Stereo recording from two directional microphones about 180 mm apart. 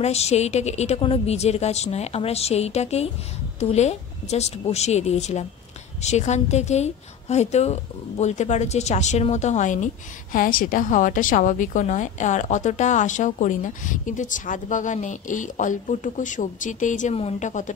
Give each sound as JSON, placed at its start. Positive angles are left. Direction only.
{"t": 0.0, "sound": "a woman's voice", "side_deg": 35}